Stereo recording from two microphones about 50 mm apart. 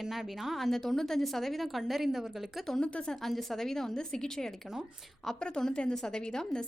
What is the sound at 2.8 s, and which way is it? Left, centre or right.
Speech, left.